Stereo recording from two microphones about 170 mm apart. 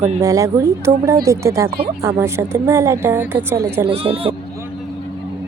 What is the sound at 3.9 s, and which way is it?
Speech, 35° right (ahead or behind).